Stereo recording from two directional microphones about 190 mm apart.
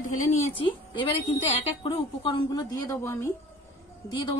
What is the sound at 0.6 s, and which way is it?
A woman's voice, 25° left (ahead or behind).